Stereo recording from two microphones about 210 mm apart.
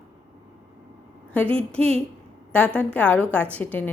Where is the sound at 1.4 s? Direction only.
30° right (ahead or behind).